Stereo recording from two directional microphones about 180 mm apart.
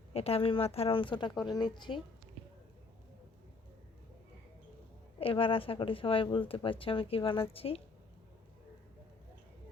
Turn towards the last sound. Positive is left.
turn(degrees=30)  # may be behind; listen again after turning